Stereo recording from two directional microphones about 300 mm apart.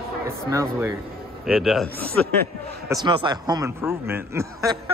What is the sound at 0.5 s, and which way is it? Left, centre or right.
A man's voice, centre.